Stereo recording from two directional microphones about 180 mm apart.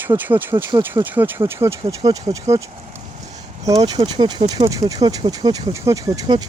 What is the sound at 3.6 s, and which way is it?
Speech, 20° right (ahead or behind).